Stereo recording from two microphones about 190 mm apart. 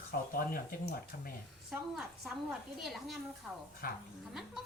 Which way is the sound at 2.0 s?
Centre (ahead or behind).